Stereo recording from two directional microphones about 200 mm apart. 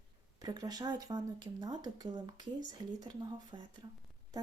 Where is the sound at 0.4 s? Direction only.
20° right (ahead or behind).